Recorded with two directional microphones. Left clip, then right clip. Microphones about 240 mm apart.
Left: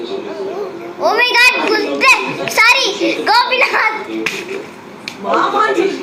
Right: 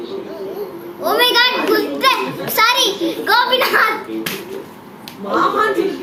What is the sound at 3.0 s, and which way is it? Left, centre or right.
Speech, centre.